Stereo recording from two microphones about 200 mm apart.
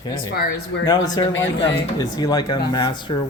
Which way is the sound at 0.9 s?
20° left (ahead or behind).